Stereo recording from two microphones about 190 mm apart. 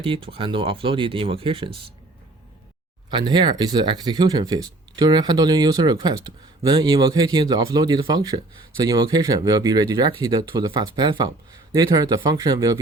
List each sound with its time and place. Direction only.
0.0 s speech: 30° right (ahead or behind)
3.1 s speech: 25° right (ahead or behind)